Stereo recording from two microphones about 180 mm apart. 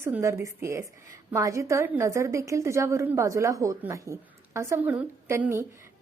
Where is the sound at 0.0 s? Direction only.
15° right (ahead or behind).